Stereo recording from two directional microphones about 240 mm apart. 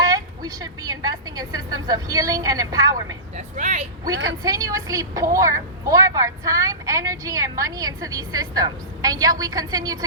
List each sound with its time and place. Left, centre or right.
0.0 s a woman's voice: centre
3.3 s speech: right
4.4 s a woman's voice: centre